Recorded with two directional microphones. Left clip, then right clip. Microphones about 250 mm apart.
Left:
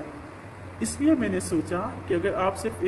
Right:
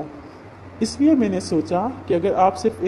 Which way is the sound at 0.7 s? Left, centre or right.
Right.